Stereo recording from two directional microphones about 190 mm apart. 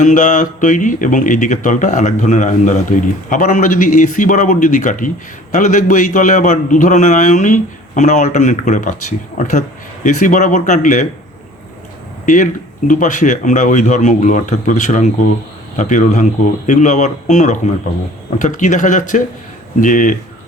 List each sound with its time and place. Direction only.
0.0 s speech: 40° left (ahead or behind)
12.2 s speech: 40° left (ahead or behind)